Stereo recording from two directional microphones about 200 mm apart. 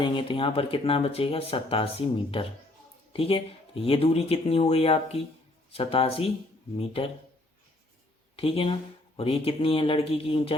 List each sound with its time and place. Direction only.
0.0 s speech: 25° left (ahead or behind)
8.4 s speech: 30° left (ahead or behind)